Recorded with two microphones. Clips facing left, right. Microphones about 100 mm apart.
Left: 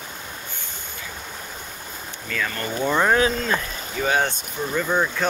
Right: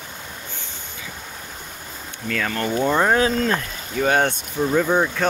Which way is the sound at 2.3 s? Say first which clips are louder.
Right 4 dB; 75° right (ahead or behind).